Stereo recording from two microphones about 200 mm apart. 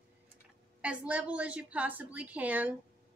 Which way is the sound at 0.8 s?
5° right (ahead or behind).